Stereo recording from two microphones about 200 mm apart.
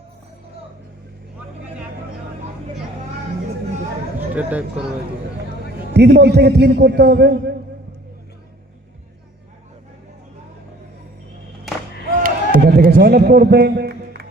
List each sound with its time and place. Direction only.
4.4 s speech: 5° right (ahead or behind)
5.9 s a man's voice: 55° right (ahead or behind)
12.2 s a sound: 45° right (ahead or behind)